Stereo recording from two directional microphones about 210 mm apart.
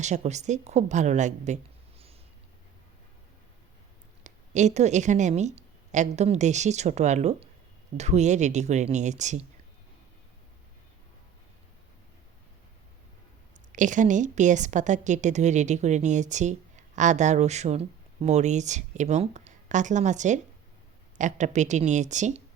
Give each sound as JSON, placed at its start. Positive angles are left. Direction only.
{"t": 0.0, "sound": "a woman's voice", "side_deg": -35}
{"t": 4.2, "sound": "a woman's voice", "side_deg": -35}
{"t": 13.7, "sound": "a woman's voice", "side_deg": -35}